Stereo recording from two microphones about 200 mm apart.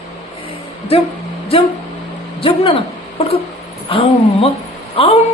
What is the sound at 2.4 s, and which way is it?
A woman's voice, 30° left (ahead or behind).